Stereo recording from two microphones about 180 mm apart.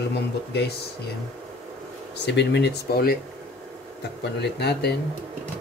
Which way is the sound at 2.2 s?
70° left (ahead or behind).